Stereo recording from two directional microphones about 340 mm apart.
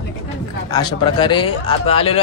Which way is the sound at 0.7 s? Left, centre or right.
Centre.